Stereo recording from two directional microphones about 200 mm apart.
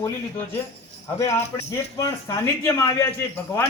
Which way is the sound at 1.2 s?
15° left (ahead or behind).